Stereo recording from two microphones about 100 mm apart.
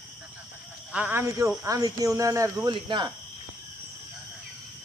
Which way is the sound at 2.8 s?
50° right (ahead or behind).